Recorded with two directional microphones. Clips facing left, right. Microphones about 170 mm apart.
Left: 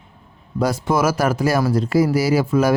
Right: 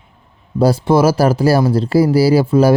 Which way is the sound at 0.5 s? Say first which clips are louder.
Right 7 dB; 30° right (ahead or behind).